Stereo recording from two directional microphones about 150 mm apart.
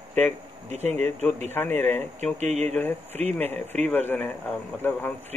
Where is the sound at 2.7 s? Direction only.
15° left (ahead or behind).